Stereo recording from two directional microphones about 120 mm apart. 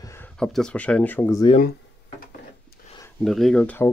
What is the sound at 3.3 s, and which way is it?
Speech, centre (ahead or behind).